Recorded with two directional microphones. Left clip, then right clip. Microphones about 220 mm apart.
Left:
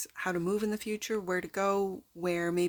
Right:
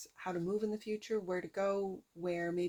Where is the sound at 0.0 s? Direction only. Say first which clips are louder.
Left 7 dB; 40° left (ahead or behind).